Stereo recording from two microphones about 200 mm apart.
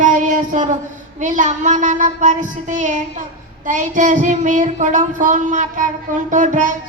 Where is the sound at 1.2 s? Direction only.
40° right (ahead or behind).